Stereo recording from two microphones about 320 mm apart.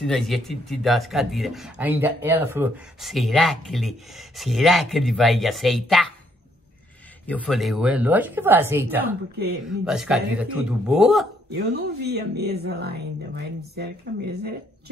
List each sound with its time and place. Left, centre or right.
0.0 s speech: centre
7.2 s speech: centre
11.5 s speech: right